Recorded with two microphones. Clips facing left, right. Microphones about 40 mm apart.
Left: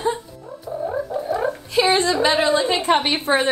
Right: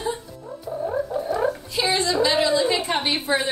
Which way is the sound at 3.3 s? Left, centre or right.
Left.